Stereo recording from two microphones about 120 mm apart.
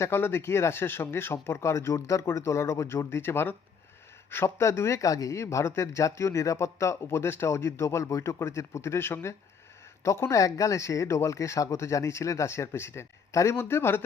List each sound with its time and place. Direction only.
0.0 s speech: 20° left (ahead or behind)